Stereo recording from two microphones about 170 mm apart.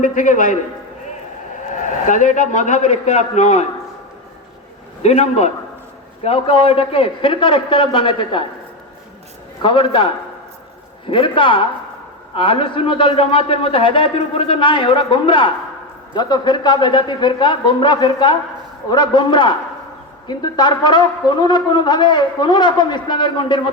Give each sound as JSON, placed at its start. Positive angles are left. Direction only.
{"t": 0.0, "sound": "a man's voice", "side_deg": 50}
{"t": 1.7, "sound": "a man's voice", "side_deg": 50}
{"t": 5.0, "sound": "a man's voice", "side_deg": 40}
{"t": 9.6, "sound": "a man's voice", "side_deg": 30}